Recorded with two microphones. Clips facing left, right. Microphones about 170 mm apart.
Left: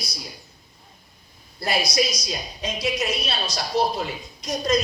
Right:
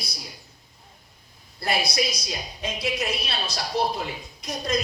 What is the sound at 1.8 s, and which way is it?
Speech, 55° right (ahead or behind).